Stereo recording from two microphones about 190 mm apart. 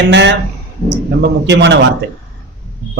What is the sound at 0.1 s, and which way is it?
Speech, 65° right (ahead or behind).